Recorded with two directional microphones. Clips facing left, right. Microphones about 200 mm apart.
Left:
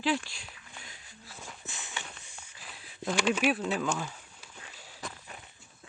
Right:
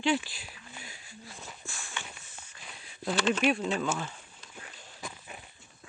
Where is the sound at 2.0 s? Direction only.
Centre (ahead or behind).